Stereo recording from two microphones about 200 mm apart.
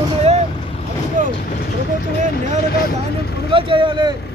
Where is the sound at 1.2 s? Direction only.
40° right (ahead or behind).